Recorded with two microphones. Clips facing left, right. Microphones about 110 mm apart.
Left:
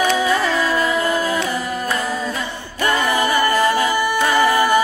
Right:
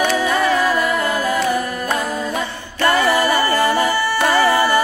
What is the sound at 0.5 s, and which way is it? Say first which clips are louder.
Music: right 2 dB; 15° right (ahead or behind).